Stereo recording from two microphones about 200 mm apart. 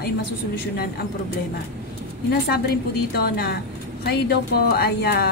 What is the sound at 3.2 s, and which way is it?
A woman's voice, 50° left (ahead or behind).